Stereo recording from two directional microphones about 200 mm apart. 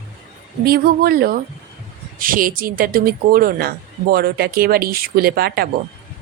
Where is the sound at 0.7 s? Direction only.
50° right (ahead or behind).